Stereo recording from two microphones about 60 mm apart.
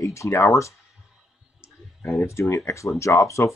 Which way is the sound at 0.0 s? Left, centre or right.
Left.